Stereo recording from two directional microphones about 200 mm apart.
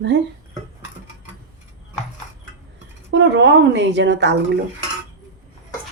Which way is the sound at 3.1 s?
60° right (ahead or behind).